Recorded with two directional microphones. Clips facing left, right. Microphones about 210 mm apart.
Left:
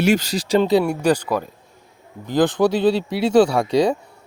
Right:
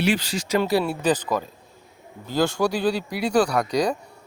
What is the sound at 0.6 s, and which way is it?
Speech, 20° left (ahead or behind).